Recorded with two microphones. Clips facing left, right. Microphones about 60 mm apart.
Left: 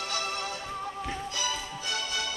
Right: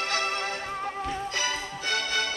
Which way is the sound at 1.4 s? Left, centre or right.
Right.